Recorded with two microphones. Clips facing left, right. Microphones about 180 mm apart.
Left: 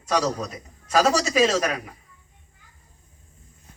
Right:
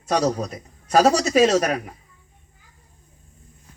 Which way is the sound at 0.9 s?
50° right (ahead or behind).